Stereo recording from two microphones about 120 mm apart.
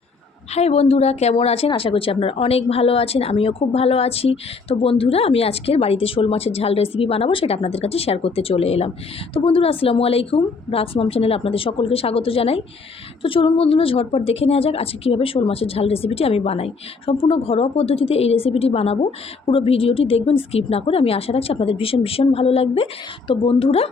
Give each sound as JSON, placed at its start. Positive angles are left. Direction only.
{"t": 0.5, "sound": "a woman's voice", "side_deg": 60}